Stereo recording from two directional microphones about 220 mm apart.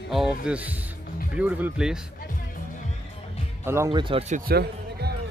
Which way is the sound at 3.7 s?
15° right (ahead or behind).